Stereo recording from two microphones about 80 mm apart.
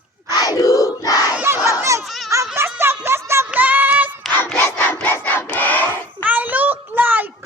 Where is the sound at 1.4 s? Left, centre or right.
Right.